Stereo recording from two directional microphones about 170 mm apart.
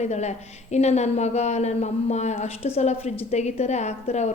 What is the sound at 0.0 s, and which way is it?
Speech, 40° left (ahead or behind).